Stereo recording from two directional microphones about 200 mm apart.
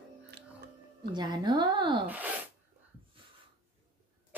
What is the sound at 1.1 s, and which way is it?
Speech, 25° right (ahead or behind).